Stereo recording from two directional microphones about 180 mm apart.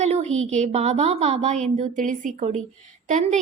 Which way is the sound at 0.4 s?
40° right (ahead or behind).